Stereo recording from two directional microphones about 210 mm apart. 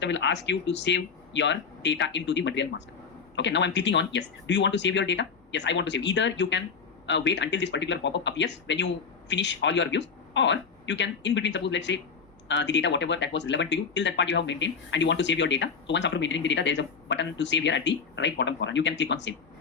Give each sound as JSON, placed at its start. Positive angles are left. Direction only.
{"t": 0.0, "sound": "speech", "side_deg": 55}